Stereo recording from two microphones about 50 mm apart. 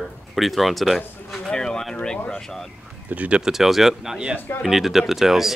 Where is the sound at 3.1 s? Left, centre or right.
Right.